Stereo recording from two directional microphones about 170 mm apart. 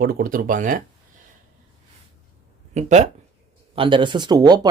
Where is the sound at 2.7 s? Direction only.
45° right (ahead or behind).